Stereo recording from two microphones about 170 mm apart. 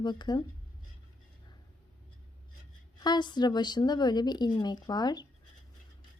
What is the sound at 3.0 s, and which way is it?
A woman's voice, 25° left (ahead or behind).